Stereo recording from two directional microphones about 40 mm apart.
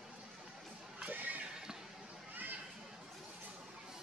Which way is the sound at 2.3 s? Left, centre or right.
Right.